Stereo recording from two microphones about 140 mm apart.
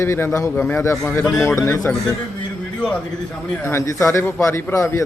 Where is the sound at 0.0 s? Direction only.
20° left (ahead or behind).